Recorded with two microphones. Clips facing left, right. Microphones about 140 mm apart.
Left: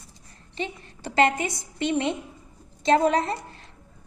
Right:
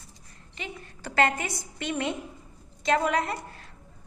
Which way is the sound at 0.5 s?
30° left (ahead or behind).